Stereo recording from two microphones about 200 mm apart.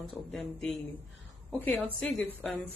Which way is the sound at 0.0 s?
Centre (ahead or behind).